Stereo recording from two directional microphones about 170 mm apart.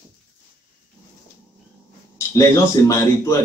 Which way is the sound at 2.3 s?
15° left (ahead or behind).